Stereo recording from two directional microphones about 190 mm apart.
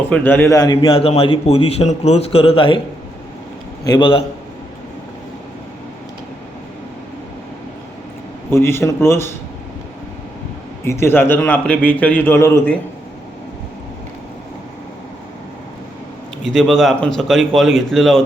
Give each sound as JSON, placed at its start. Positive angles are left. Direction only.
{"t": 0.1, "sound": "a man's voice", "side_deg": 10}
{"t": 3.8, "sound": "a man's voice", "side_deg": 25}
{"t": 8.4, "sound": "a man's voice", "side_deg": 10}
{"t": 10.8, "sound": "a man's voice", "side_deg": 15}
{"t": 16.5, "sound": "a man's voice", "side_deg": 0}